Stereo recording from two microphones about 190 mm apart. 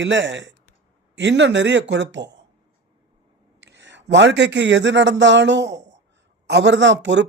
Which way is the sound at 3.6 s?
70° right (ahead or behind).